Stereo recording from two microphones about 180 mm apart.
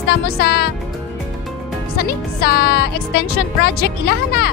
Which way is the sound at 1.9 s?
60° left (ahead or behind).